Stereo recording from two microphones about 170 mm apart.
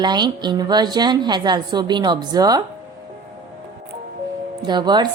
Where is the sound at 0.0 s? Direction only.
25° right (ahead or behind).